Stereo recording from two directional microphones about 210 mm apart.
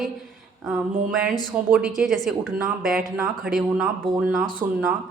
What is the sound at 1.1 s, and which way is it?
Speech, 5° right (ahead or behind).